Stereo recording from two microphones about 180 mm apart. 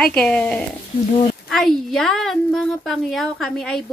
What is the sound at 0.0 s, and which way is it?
A woman's voice, 5° left (ahead or behind).